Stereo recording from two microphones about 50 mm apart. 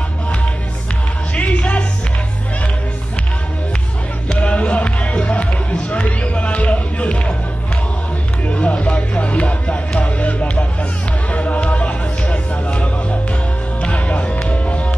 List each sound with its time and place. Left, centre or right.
1.3 s music: left
4.3 s music: left
8.5 s music: left